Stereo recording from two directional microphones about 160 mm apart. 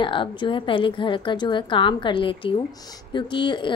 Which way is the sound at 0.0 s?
30° left (ahead or behind).